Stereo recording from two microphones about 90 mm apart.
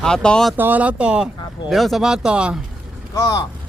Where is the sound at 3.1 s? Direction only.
35° left (ahead or behind).